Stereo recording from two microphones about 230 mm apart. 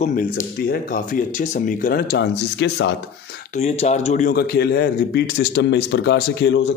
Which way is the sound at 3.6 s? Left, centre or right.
Left.